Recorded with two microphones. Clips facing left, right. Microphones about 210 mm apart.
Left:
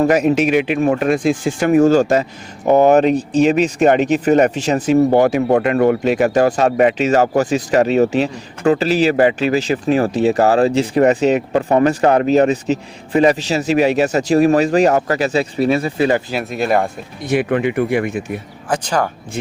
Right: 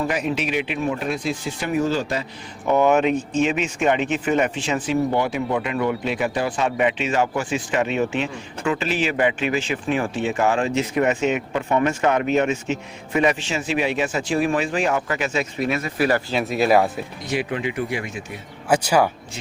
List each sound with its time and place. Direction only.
0.0 s speech: 45° left (ahead or behind)
0.9 s speech: 65° left (ahead or behind); by 5.5 s 45° left (ahead or behind)
5.5 s speech: 65° left (ahead or behind)
5.8 s speech: 45° left (ahead or behind); by 16.2 s 25° left (ahead or behind)
16.3 s speech: centre (ahead or behind)
17.2 s speech: 55° left (ahead or behind)
18.7 s speech: 10° right (ahead or behind)